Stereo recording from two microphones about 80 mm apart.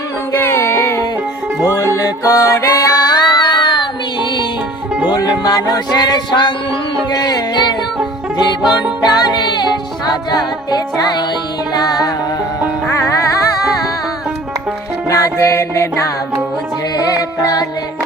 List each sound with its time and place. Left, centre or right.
0.3 s music: left
2.0 s music: left
5.1 s music: left
9.0 s music: left
12.9 s music: left
15.1 s music: left
17.1 s music: left